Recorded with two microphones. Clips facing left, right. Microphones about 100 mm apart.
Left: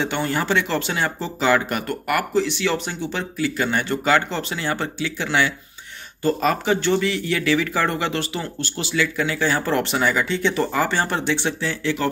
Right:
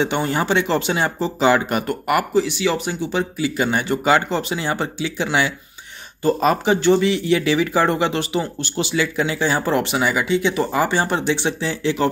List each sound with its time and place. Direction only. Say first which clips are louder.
0.0 s speech: right 3 dB; 20° right (ahead or behind)
2.3 s speech: right 2 dB; 10° right (ahead or behind)